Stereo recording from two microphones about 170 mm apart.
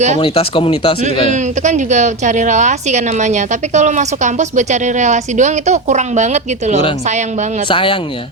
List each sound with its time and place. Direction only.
0.2 s speech: 30° left (ahead or behind)
1.3 s speech: 45° right (ahead or behind)
7.7 s speech: 30° left (ahead or behind)